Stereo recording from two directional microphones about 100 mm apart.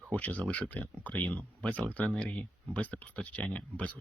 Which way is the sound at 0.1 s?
15° left (ahead or behind).